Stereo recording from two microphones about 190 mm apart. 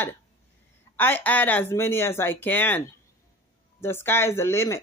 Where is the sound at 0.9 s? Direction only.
10° left (ahead or behind).